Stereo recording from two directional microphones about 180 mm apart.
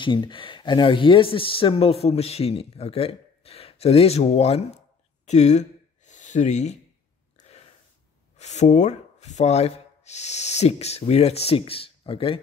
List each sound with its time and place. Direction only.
0.0 s speech: 25° left (ahead or behind)
5.2 s a sound: 40° left (ahead or behind)
8.4 s speech: 40° left (ahead or behind)